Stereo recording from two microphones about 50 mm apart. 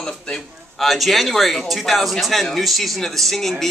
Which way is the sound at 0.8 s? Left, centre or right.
Centre.